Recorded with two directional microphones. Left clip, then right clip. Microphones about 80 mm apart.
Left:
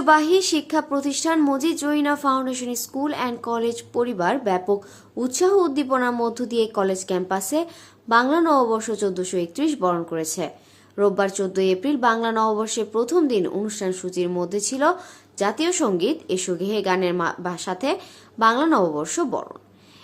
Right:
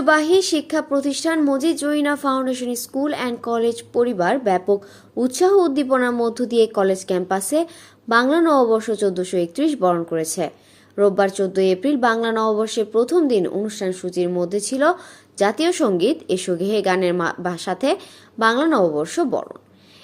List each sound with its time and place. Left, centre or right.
0.0 s speech: right
15.4 s a woman's voice: right
18.3 s speech: right